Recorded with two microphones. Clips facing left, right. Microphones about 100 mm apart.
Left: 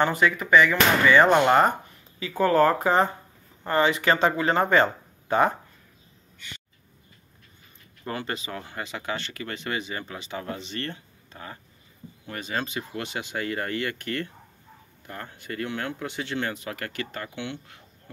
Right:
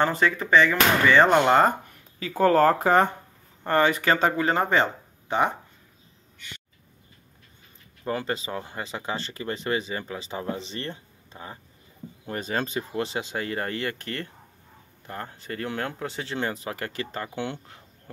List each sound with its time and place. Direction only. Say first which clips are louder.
0.2 s speech: left 2 dB; 30° right (ahead or behind)
1.2 s speech: even; 5° left (ahead or behind)
2.1 s speech: right 1 dB; 40° right (ahead or behind)
8.2 s speech: right 3 dB; 30° right (ahead or behind)
12.3 s speech: right 2 dB; 35° right (ahead or behind)